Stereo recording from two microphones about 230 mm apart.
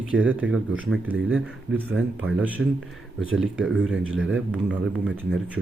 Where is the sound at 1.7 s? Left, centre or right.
Right.